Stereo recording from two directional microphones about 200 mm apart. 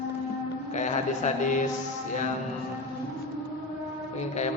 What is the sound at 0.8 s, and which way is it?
Speech, 35° left (ahead or behind).